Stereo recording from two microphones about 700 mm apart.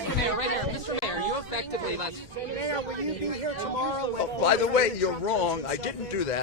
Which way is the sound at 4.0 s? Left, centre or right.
Left.